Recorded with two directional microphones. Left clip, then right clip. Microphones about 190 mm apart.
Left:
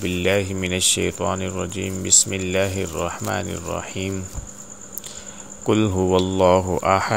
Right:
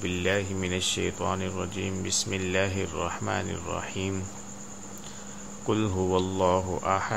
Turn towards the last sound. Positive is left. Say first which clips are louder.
# left 8 dB
turn(degrees=35)  # may be behind; listen again after turning